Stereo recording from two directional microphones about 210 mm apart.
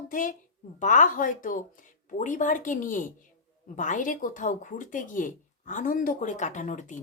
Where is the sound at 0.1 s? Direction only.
40° left (ahead or behind).